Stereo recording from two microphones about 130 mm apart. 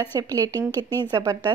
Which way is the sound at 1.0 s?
30° right (ahead or behind).